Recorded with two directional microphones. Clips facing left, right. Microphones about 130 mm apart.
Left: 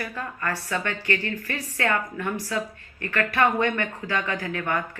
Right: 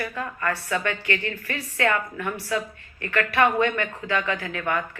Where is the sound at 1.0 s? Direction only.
35° left (ahead or behind).